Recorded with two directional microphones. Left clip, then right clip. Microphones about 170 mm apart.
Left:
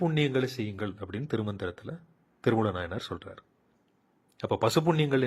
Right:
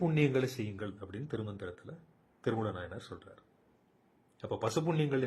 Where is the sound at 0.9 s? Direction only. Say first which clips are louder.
Left 7 dB; 30° left (ahead or behind).